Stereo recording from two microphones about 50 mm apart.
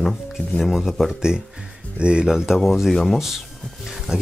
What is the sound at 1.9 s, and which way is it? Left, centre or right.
Speech, centre.